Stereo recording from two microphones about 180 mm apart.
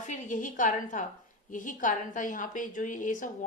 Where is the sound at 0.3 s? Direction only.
45° left (ahead or behind).